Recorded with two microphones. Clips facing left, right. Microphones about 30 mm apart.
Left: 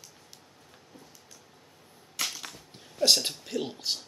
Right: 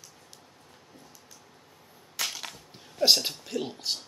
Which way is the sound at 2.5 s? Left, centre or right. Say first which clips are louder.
Even; centre.